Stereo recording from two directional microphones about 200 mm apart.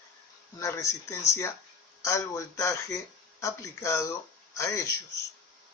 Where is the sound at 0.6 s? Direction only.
15° left (ahead or behind).